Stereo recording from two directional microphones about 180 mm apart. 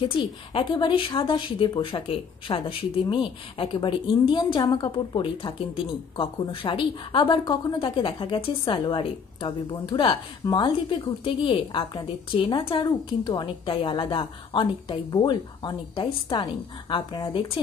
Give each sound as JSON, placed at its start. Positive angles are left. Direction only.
{"t": 0.2, "sound": "a woman's voice", "side_deg": 25}